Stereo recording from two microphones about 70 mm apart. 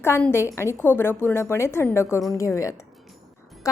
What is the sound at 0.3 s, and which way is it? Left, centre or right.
A woman's voice, left.